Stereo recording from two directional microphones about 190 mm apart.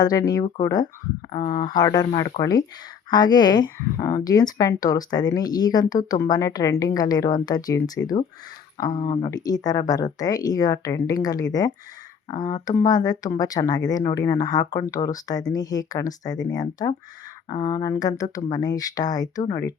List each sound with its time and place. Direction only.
0.0 s speech: 20° left (ahead or behind)
1.4 s speech: 30° left (ahead or behind)
1.7 s speech: 20° left (ahead or behind)
9.0 s speech: 30° left (ahead or behind)
9.3 s speech: 20° left (ahead or behind)